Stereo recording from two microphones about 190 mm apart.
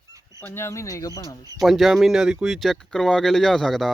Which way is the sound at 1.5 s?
Centre (ahead or behind).